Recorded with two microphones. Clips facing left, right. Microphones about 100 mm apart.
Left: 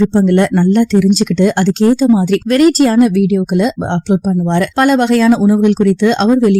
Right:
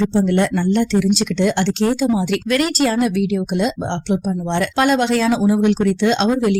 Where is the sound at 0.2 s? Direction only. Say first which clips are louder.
Left 5 dB; 50° left (ahead or behind).